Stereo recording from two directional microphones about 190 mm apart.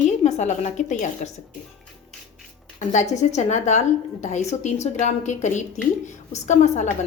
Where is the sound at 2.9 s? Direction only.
40° left (ahead or behind).